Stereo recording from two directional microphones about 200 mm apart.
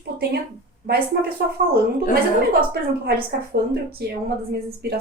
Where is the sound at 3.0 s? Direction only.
50° right (ahead or behind).